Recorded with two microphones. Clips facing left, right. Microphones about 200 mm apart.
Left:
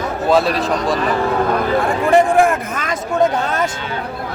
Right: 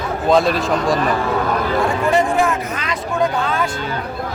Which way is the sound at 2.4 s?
50° left (ahead or behind).